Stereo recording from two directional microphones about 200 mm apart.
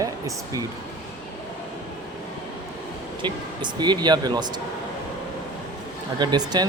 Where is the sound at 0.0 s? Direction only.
15° right (ahead or behind).